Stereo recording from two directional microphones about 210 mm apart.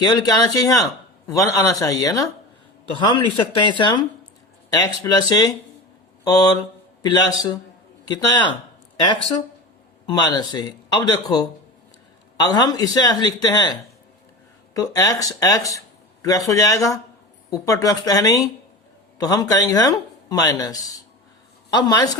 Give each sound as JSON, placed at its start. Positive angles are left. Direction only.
{"t": 0.0, "sound": "speech", "side_deg": 20}
{"t": 7.0, "sound": "speech", "side_deg": 20}
{"t": 10.1, "sound": "speech", "side_deg": 20}